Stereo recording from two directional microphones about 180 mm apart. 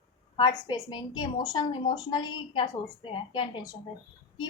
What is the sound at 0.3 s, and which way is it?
A woman's voice, 25° left (ahead or behind).